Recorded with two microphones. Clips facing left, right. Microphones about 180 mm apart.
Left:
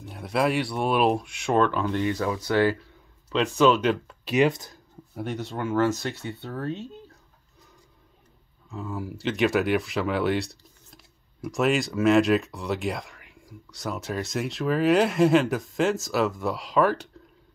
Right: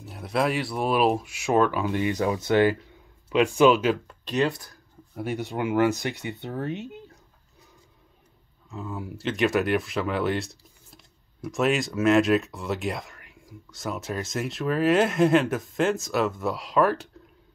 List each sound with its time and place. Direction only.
0.0 s speech: centre (ahead or behind)
4.2 s a sound: 10° left (ahead or behind)
4.5 s speech: 20° left (ahead or behind)
5.1 s speech: 10° right (ahead or behind)
8.6 s speech: centre (ahead or behind)